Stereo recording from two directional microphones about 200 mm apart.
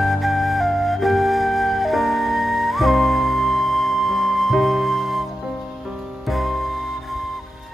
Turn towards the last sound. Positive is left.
turn(degrees=0)  # may be behind; listen again after turning